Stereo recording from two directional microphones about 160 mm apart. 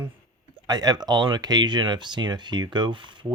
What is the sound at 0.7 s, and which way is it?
Speech, 25° right (ahead or behind).